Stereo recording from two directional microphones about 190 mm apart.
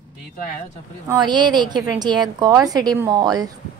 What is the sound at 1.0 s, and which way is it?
A woman's voice, 25° right (ahead or behind).